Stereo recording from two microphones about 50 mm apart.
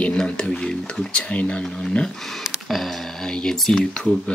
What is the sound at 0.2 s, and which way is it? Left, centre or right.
Speech, centre.